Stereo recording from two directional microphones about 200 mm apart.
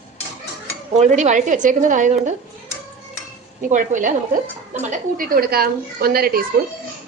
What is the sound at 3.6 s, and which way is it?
A woman's voice, 40° right (ahead or behind).